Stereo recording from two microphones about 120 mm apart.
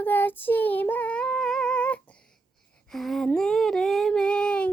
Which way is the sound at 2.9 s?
Centre (ahead or behind).